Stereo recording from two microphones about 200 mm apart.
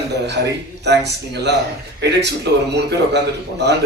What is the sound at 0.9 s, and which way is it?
Speech, 55° right (ahead or behind).